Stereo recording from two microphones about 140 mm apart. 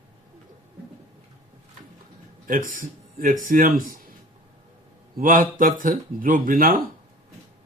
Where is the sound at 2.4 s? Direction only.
75° right (ahead or behind).